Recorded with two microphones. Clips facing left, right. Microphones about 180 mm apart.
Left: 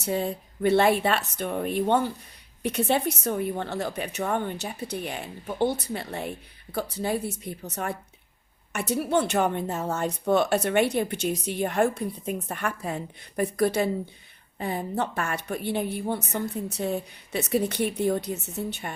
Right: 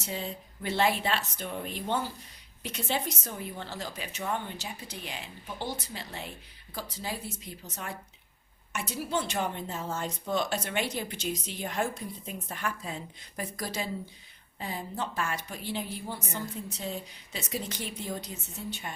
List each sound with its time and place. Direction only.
0.0 s a woman's voice: 60° left (ahead or behind)